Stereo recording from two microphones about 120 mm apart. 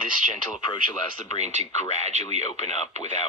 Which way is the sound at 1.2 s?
75° right (ahead or behind).